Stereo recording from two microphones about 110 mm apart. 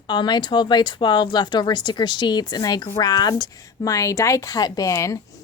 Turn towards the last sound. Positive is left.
turn(degrees=30)  # may be behind; listen again after turning